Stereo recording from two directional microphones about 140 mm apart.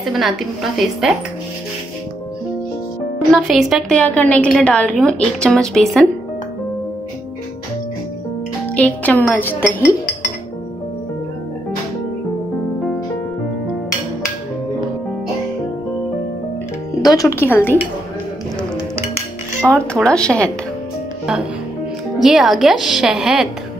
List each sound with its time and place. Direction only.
0.0 s a woman's voice: centre (ahead or behind)
3.3 s a woman's voice: centre (ahead or behind)
8.6 s speech: 10° left (ahead or behind)
17.1 s speech: 25° left (ahead or behind)
19.6 s speech: 5° left (ahead or behind)
22.2 s a woman's voice: centre (ahead or behind)